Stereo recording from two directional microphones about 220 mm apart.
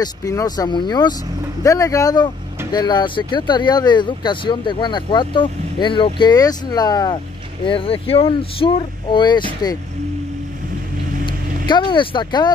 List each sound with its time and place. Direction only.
0.0 s speech: 15° left (ahead or behind)
11.6 s speech: 20° left (ahead or behind)